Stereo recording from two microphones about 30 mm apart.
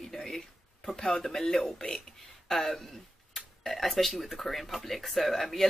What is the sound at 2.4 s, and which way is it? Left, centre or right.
Speech, centre.